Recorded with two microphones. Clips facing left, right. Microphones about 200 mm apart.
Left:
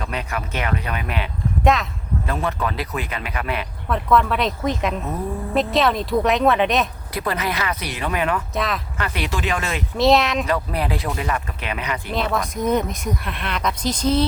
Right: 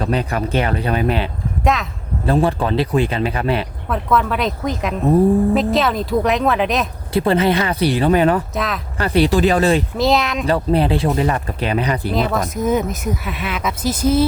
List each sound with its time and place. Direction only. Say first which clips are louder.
0.0 s speech: right 8 dB; 35° right (ahead or behind)
1.6 s speech: even; centre (ahead or behind)
2.2 s speech: right 9 dB; 30° right (ahead or behind)
3.8 s speech: left 1 dB; centre (ahead or behind)
7.1 s speech: right 9 dB; 30° right (ahead or behind)
8.5 s speech: right 1 dB; centre (ahead or behind)
9.0 s speech: right 15 dB; 35° right (ahead or behind)
10.0 s speech: even; centre (ahead or behind)
10.4 s speech: right 7 dB; 30° right (ahead or behind)
12.1 s speech: even; centre (ahead or behind)